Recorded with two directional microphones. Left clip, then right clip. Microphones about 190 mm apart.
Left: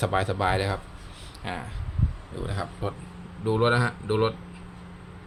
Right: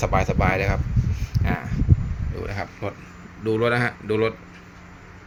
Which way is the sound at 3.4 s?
5° right (ahead or behind).